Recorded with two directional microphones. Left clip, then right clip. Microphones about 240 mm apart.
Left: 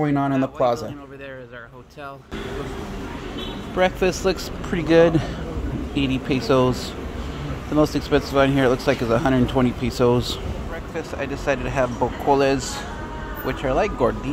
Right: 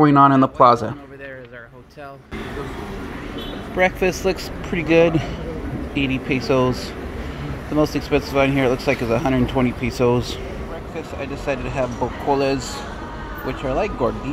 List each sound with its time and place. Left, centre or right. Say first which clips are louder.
0.0 s a man's voice: right 9 dB; right
3.7 s speech: right 1 dB; centre